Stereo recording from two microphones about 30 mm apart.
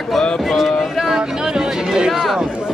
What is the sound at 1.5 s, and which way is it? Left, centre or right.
Speech, right.